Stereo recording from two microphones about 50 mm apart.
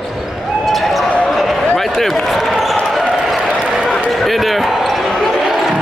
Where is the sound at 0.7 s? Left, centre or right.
Centre.